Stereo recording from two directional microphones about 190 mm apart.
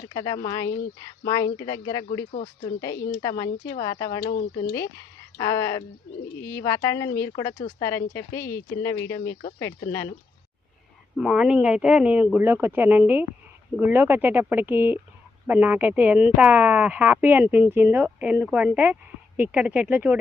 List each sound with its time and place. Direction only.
0.1 s speech: 20° left (ahead or behind)
4.3 s speech: 50° left (ahead or behind)
5.4 s speech: 15° left (ahead or behind)
11.2 s speech: 5° right (ahead or behind)